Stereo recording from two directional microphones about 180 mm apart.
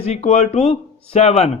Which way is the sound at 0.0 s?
35° left (ahead or behind).